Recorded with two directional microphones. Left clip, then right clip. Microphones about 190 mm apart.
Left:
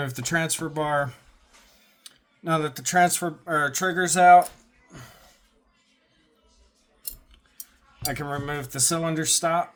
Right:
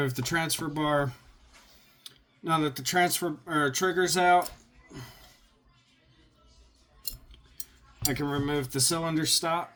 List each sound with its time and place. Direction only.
0.0 s speech: 40° left (ahead or behind)
4.9 s music: 45° left (ahead or behind)
8.1 s speech: 45° left (ahead or behind)